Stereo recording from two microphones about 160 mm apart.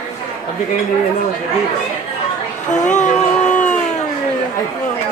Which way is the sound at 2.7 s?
50° left (ahead or behind).